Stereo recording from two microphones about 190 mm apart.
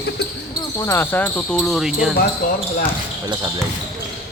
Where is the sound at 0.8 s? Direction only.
15° left (ahead or behind); by 2.1 s 5° right (ahead or behind).